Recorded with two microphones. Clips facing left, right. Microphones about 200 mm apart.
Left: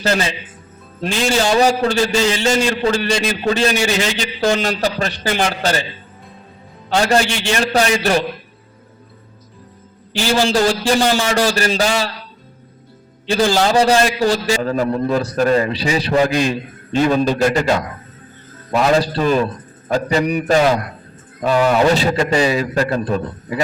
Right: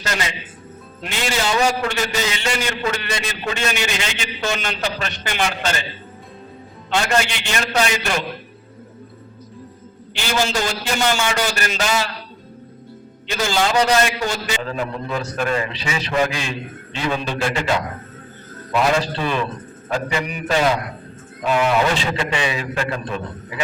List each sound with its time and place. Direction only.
0.0 s a man's voice: 30° left (ahead or behind)
6.9 s a man's voice: 35° left (ahead or behind)
10.2 s a man's voice: 35° left (ahead or behind)
13.2 s a man's voice: 30° left (ahead or behind)